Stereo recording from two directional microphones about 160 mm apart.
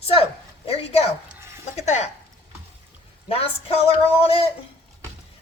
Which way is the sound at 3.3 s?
40° left (ahead or behind).